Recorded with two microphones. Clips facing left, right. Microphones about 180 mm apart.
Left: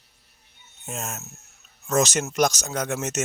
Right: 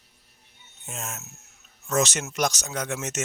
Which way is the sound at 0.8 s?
40° left (ahead or behind).